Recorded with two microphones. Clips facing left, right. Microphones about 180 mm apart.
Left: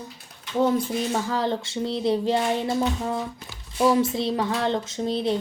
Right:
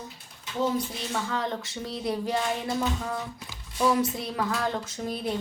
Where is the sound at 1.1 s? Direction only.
35° left (ahead or behind).